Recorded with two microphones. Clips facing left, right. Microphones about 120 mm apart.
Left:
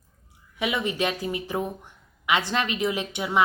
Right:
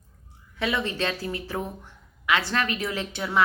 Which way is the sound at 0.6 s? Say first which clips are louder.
Left 1 dB; 15° left (ahead or behind).